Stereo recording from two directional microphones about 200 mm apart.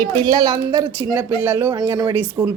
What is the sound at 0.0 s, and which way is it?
A woman's voice, 20° right (ahead or behind).